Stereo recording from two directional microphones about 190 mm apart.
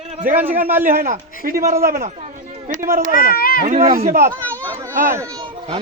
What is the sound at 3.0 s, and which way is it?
Speech, 50° left (ahead or behind).